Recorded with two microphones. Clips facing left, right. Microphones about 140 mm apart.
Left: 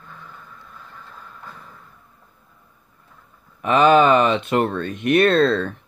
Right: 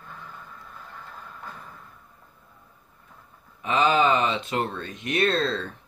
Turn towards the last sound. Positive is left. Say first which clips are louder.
# left 8 dB
turn(degrees=65)  # may be behind; listen again after turning